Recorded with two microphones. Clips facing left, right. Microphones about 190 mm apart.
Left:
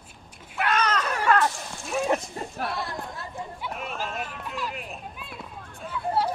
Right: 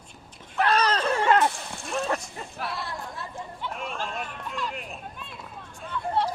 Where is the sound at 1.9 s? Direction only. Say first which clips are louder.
Left 3 dB; 15° left (ahead or behind).